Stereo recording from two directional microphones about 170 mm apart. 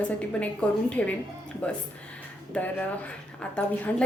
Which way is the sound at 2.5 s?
10° left (ahead or behind).